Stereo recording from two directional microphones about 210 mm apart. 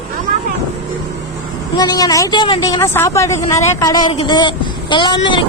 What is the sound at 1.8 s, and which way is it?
Speech, 20° left (ahead or behind).